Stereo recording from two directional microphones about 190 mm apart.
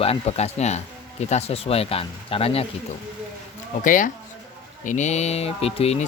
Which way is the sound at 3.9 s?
45° left (ahead or behind).